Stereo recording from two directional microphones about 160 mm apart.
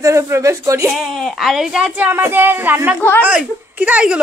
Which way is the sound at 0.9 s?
Centre (ahead or behind).